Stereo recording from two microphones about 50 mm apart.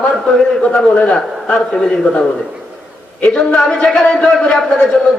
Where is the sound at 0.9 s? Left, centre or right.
Left.